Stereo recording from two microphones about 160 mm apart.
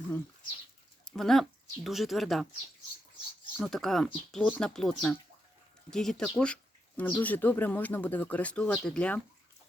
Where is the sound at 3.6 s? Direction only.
Centre (ahead or behind).